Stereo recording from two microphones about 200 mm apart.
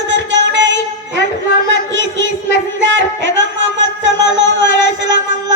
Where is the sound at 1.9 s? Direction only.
65° right (ahead or behind).